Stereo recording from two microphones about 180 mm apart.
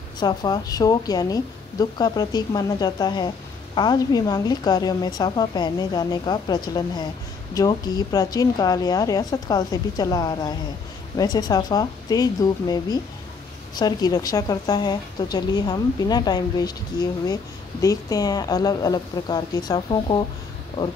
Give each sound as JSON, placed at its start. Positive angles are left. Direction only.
{"t": 0.2, "sound": "a woman's voice", "side_deg": 20}